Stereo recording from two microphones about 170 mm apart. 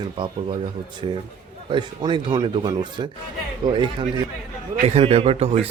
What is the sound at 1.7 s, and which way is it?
A man's voice, 30° right (ahead or behind).